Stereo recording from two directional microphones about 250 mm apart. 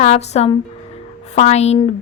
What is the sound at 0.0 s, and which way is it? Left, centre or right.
Speech, left.